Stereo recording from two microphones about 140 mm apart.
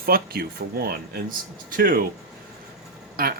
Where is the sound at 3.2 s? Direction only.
90° right.